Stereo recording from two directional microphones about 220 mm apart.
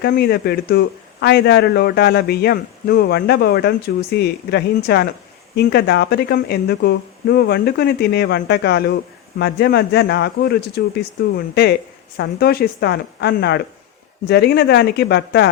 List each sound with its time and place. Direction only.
0.0 s speech: 45° left (ahead or behind)